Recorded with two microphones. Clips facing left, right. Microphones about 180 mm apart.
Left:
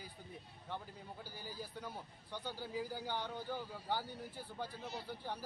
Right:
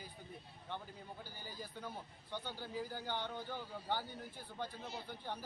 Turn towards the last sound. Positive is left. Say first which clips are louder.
# left 1 dB
turn(degrees=10)  # may be behind; listen again after turning